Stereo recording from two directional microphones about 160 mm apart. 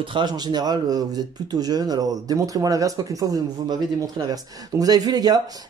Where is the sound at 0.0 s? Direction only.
30° right (ahead or behind).